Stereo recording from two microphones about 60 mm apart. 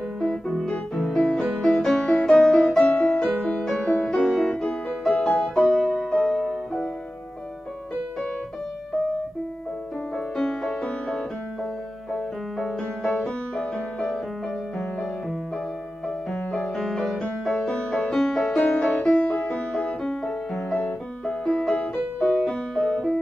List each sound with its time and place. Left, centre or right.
0.2 s music: centre
3.3 s music: centre
10.1 s music: centre
16.3 s music: centre